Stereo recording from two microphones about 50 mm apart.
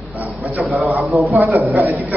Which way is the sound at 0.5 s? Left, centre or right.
Right.